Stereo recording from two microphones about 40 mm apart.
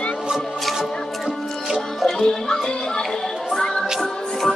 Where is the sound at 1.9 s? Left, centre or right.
Centre.